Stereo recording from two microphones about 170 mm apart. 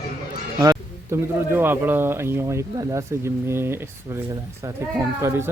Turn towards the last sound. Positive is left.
turn(degrees=-15)  # may be behind; listen again after turning